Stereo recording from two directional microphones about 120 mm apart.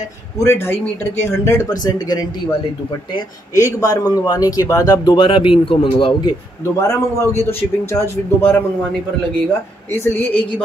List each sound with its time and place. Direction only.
0.4 s a man's voice: 20° left (ahead or behind)
1.8 s speech: 30° left (ahead or behind)
3.5 s speech: 30° left (ahead or behind); by 6.1 s 45° left (ahead or behind)
6.8 s a man's voice: 25° left (ahead or behind)
9.9 s a man's voice: 20° left (ahead or behind)